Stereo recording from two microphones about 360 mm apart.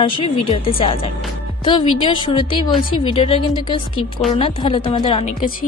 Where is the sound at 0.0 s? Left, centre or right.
Centre.